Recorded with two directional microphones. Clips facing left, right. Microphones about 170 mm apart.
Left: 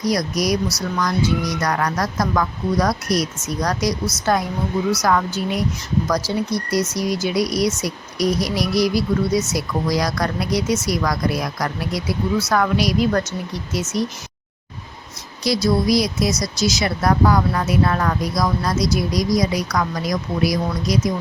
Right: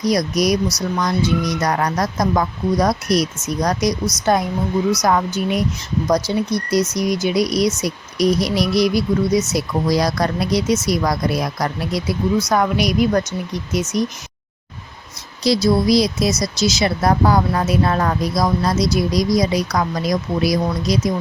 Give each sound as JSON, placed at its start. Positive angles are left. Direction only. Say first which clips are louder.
{"t": 0.0, "sound": "speech", "louder": "right 3 dB", "side_deg": -20}
{"t": 15.4, "sound": "speech", "louder": "right 3 dB", "side_deg": -25}